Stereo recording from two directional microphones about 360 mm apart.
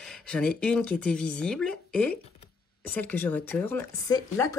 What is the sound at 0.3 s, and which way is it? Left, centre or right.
Speech, centre.